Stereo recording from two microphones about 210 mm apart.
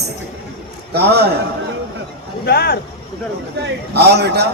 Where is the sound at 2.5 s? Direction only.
50° left (ahead or behind).